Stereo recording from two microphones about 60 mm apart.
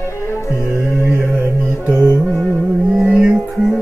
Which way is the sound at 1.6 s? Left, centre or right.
Centre.